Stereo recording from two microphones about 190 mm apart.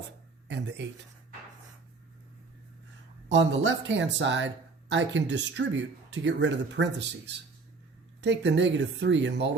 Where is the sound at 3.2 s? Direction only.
70° right (ahead or behind).